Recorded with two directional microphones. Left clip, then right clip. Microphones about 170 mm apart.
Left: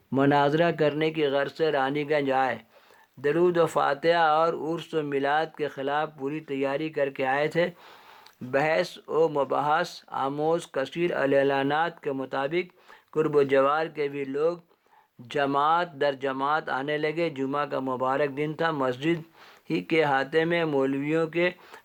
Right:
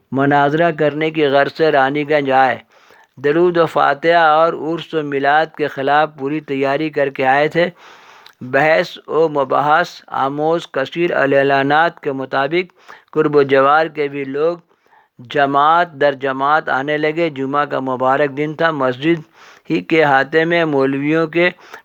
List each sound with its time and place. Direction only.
0.1 s speech: 20° right (ahead or behind)